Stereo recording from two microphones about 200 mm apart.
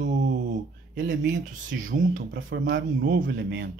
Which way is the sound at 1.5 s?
40° right (ahead or behind).